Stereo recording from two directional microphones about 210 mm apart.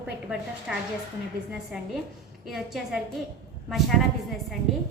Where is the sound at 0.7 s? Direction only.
5° right (ahead or behind).